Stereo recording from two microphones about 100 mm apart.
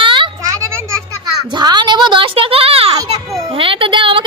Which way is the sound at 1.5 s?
45° right (ahead or behind).